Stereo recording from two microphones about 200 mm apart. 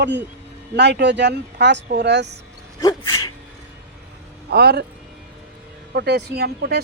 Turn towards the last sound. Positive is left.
turn(degrees=-55)  # may be behind; listen again after turning